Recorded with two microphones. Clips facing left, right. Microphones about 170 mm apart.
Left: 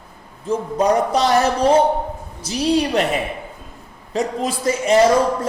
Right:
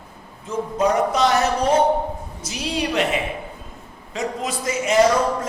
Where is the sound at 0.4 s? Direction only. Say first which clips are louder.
Left 3 dB; 35° left (ahead or behind).